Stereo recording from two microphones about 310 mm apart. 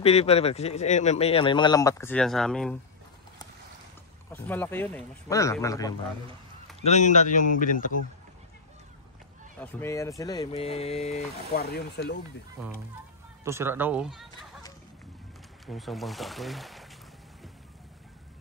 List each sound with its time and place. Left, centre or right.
0.0 s speech: centre
4.3 s speech: centre
6.8 s speech: left
9.6 s speech: centre; by 12.2 s left
13.4 s speech: centre
15.6 s speech: centre